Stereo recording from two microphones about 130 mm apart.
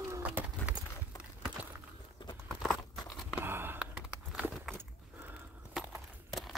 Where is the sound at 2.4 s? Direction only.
5° left (ahead or behind).